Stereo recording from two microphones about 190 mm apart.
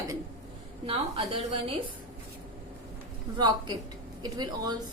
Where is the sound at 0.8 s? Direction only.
30° right (ahead or behind).